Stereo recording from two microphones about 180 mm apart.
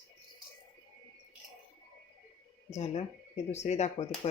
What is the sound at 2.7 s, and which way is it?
Speech, 35° left (ahead or behind).